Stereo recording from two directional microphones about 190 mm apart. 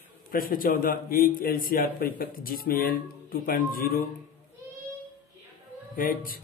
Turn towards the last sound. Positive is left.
turn(degrees=45)  # may be behind; listen again after turning